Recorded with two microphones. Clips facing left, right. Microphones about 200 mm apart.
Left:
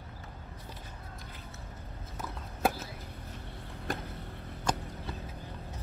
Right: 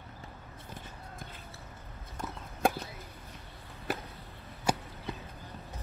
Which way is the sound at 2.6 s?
Centre (ahead or behind).